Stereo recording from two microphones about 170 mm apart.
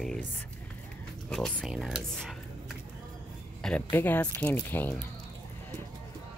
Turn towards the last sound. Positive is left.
turn(degrees=10)  # may be behind; listen again after turning